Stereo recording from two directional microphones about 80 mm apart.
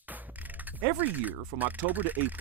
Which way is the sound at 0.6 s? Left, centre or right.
Right.